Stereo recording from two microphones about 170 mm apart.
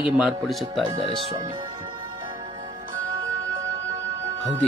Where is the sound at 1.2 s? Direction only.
35° right (ahead or behind).